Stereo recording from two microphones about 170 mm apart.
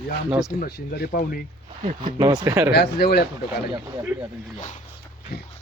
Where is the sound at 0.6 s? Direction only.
65° left (ahead or behind).